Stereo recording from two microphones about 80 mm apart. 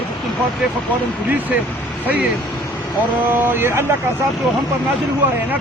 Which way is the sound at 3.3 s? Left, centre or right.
Right.